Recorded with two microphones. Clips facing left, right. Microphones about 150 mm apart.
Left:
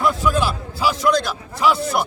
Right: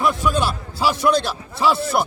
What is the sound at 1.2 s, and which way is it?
Speech, 30° right (ahead or behind).